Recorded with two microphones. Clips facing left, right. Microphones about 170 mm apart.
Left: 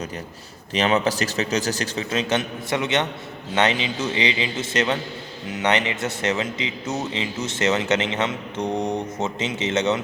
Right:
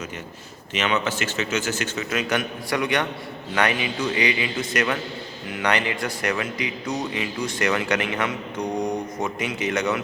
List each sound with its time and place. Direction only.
0.7 s a man's voice: 35° left (ahead or behind)